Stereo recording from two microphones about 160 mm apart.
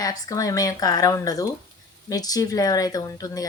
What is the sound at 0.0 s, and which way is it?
Speech, 20° left (ahead or behind).